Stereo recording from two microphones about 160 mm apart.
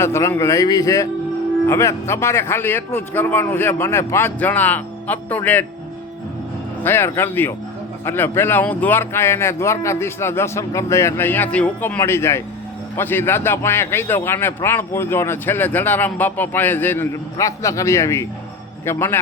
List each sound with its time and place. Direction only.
0.0 s a man's voice: 15° left (ahead or behind)
6.8 s a man's voice: 15° left (ahead or behind)